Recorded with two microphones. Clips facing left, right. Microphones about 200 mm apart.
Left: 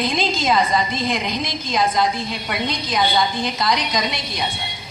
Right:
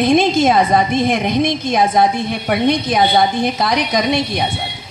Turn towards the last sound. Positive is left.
turn(degrees=-55)  # may be behind; listen again after turning